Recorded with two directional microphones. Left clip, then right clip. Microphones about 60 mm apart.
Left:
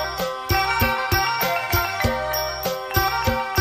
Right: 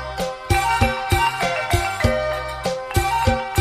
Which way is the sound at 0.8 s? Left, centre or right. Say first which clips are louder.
Right 1 dB; right.